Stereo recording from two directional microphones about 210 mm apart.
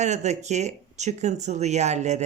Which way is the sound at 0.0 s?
35° right (ahead or behind).